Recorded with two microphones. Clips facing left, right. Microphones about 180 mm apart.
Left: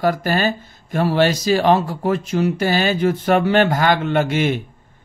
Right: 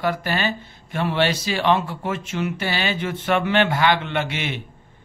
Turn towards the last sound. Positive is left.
turn(degrees=45)  # may be behind; listen again after turning